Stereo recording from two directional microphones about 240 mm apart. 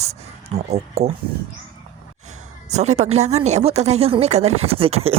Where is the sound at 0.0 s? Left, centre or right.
Right.